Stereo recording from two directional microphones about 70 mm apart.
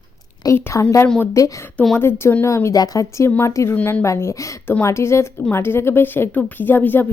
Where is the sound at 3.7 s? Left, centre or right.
Left.